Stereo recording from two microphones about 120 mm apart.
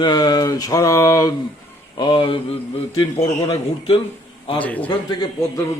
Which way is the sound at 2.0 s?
40° left (ahead or behind).